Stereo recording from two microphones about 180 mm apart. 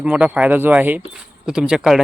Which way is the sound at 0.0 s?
5° right (ahead or behind).